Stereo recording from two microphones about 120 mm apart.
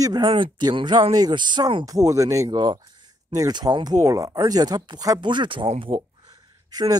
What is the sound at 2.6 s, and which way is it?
Speech, 40° right (ahead or behind).